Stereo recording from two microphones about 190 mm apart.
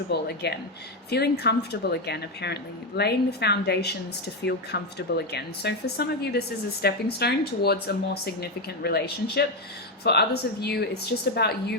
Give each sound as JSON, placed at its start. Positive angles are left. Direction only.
{"t": 0.1, "sound": "speech", "side_deg": 60}